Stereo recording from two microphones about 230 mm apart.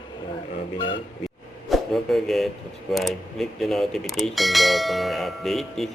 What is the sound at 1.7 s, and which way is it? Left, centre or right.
Speech, centre.